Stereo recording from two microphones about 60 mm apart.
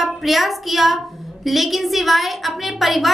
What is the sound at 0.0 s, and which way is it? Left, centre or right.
A child's voice, centre.